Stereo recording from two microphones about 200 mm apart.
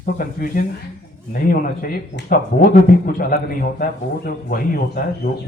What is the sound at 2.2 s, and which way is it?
A man's voice, 45° left (ahead or behind).